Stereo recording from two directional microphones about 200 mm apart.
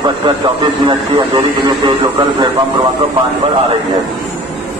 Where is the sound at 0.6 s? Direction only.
20° right (ahead or behind).